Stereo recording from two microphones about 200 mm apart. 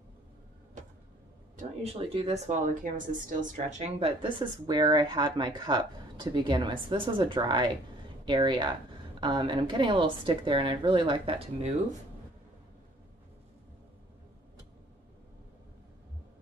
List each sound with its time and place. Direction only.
1.6 s speech: 30° right (ahead or behind)